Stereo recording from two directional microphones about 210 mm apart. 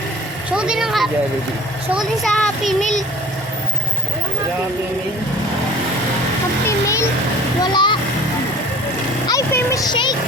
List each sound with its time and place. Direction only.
0.5 s speech: 5° right (ahead or behind)
2.6 s a child's voice: 35° left (ahead or behind)
7.6 s speech: 20° left (ahead or behind)
9.2 s speech: 15° left (ahead or behind)